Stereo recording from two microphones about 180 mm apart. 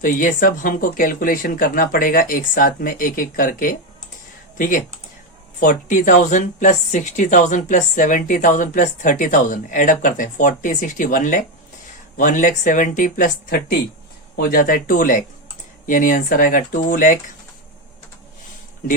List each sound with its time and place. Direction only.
0.0 s speech: 50° left (ahead or behind)